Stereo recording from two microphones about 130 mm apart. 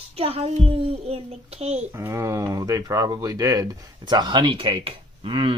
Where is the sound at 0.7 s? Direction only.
50° right (ahead or behind).